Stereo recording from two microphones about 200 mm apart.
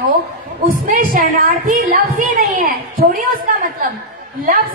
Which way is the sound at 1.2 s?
45° right (ahead or behind).